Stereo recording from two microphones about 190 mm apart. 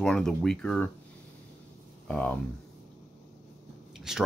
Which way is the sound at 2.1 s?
5° left (ahead or behind).